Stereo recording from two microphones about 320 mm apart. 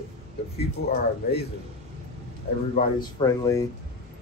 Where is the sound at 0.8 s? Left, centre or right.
Left.